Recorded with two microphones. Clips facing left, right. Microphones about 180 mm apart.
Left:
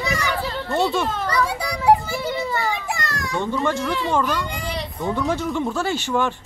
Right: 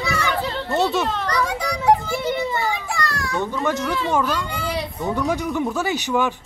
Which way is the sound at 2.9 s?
20° left (ahead or behind).